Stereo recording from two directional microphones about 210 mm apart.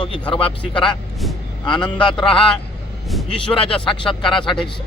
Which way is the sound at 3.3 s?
25° left (ahead or behind).